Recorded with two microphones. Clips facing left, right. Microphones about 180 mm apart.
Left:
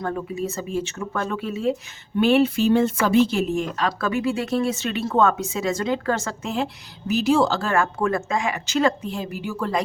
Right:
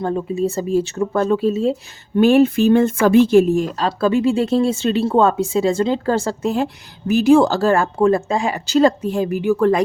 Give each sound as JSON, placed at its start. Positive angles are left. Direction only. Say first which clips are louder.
{"t": 0.0, "sound": "speech", "louder": "right 7 dB", "side_deg": -25}
{"t": 2.1, "sound": "speech", "louder": "right 5 dB", "side_deg": -45}
{"t": 7.1, "sound": "speech", "louder": "right 7 dB", "side_deg": -50}